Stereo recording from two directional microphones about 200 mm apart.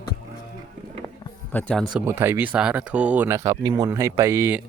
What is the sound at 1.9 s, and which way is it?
Speech, 10° right (ahead or behind).